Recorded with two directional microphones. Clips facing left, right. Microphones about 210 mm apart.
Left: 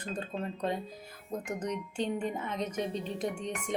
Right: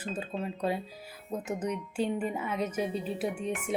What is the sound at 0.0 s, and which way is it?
Speech, 5° right (ahead or behind).